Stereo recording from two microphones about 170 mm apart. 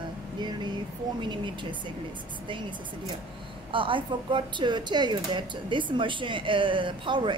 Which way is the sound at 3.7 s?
30° right (ahead or behind).